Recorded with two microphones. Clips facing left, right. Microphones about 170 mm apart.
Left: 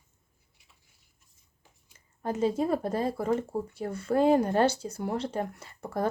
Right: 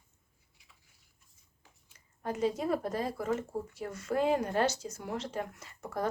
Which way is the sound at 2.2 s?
25° left (ahead or behind).